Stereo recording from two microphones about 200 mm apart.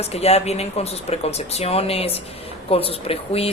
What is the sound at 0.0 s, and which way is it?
Speech, 30° left (ahead or behind).